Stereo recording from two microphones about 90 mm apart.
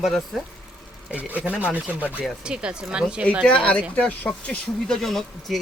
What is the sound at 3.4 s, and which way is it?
Speech, 10° left (ahead or behind).